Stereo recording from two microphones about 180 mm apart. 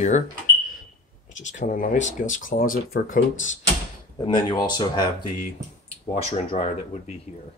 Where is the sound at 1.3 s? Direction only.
45° left (ahead or behind).